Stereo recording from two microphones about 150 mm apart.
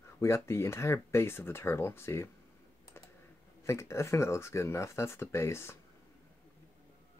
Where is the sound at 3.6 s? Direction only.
20° left (ahead or behind).